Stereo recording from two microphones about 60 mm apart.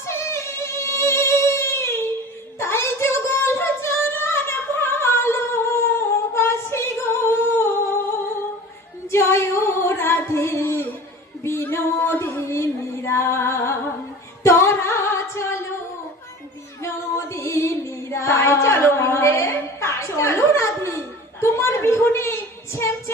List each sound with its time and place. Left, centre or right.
0.0 s music: left
2.6 s a sound: left
6.0 s humming: left
9.1 s singing: left
11.4 s music: left
14.4 s singing: left
16.8 s female singing: left
21.4 s a sound: left